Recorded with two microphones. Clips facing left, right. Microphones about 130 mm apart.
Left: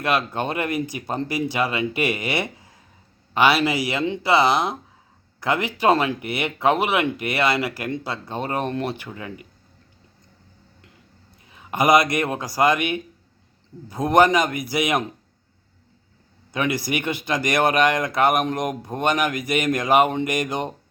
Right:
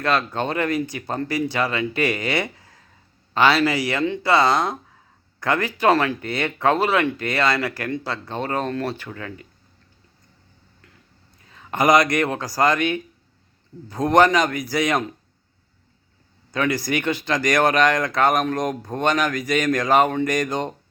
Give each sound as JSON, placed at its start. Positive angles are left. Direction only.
{"t": 0.0, "sound": "speech", "side_deg": 15}
{"t": 11.4, "sound": "a man's voice", "side_deg": 15}
{"t": 16.5, "sound": "speech", "side_deg": 15}